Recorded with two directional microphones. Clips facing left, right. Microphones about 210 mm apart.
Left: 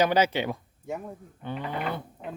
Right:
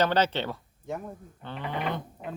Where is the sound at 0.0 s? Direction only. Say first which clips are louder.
Left 2 dB; 10° left (ahead or behind).